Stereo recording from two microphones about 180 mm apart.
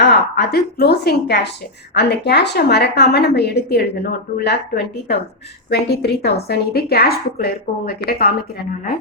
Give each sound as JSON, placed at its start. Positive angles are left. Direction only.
{"t": 0.0, "sound": "a woman's voice", "side_deg": 65}